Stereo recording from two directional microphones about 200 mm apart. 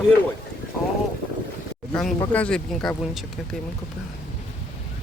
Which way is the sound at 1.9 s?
5° left (ahead or behind).